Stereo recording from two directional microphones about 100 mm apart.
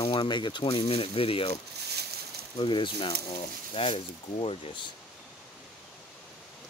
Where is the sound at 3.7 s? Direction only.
65° left (ahead or behind).